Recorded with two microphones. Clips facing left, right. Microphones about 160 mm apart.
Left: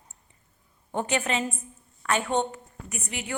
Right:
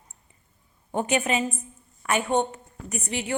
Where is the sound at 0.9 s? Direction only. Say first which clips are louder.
Right 3 dB; 15° right (ahead or behind).